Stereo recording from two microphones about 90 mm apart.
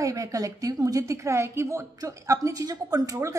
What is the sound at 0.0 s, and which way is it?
Speech, 40° right (ahead or behind).